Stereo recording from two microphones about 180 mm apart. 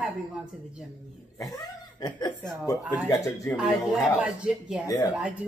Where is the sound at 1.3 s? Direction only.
20° left (ahead or behind).